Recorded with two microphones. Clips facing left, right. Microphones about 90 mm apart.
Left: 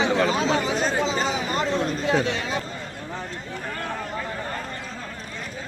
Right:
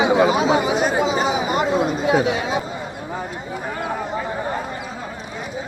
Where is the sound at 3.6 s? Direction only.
15° right (ahead or behind).